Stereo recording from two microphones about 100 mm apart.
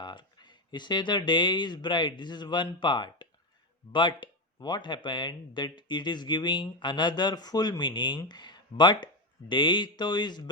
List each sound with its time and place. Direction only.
0.0 s speech: 50° left (ahead or behind)